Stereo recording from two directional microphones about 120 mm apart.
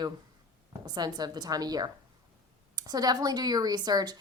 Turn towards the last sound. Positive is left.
turn(degrees=-35)  # may be behind; listen again after turning